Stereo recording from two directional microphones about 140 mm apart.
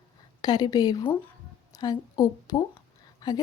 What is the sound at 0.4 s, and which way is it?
A woman's voice, 30° left (ahead or behind).